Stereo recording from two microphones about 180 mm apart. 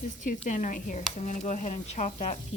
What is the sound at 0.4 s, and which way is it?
Speech, 45° left (ahead or behind).